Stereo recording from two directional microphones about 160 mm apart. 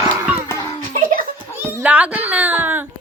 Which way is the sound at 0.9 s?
60° right (ahead or behind).